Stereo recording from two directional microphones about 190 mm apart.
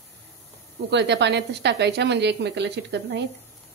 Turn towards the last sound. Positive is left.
turn(degrees=-65)  # may be behind; listen again after turning